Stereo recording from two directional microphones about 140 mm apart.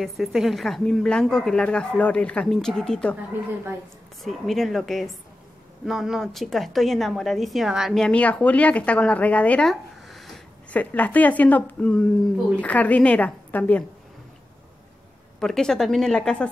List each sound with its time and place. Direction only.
0.0 s a woman's voice: centre (ahead or behind)
4.2 s a woman's voice: centre (ahead or behind)
10.8 s a woman's voice: 10° left (ahead or behind)
15.4 s a woman's voice: 5° left (ahead or behind)